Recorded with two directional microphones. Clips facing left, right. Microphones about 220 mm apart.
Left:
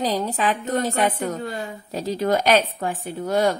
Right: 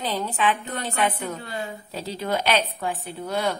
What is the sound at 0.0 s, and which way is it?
A woman's voice, 40° left (ahead or behind).